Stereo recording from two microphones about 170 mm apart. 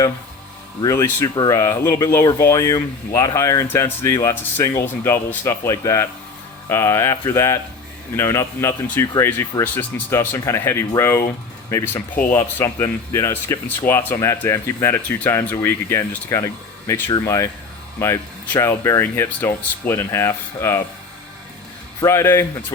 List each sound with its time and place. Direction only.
0.8 s speech: 20° left (ahead or behind)
22.0 s speech: 15° left (ahead or behind)